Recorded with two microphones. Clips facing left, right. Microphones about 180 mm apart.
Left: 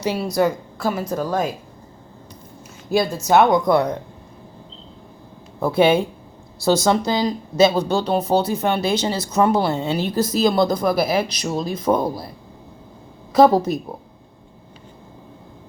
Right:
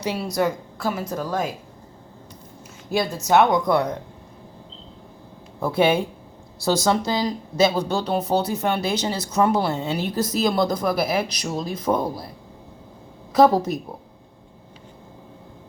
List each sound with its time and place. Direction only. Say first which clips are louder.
0.0 s a woman's voice: left 4 dB; 30° left (ahead or behind)
2.9 s a woman's voice: left 3 dB; 35° left (ahead or behind)
5.7 s speech: left 3 dB; 30° left (ahead or behind)
13.3 s speech: left 2 dB; 25° left (ahead or behind)